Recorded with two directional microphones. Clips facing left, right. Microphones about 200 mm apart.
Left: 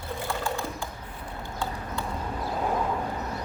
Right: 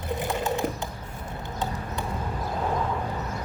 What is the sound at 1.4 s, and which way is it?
Clip-clop, 20° right (ahead or behind).